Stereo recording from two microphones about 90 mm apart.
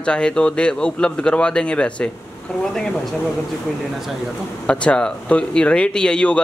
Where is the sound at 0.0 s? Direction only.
10° left (ahead or behind).